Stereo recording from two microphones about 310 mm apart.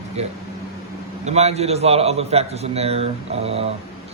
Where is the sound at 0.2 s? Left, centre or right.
Right.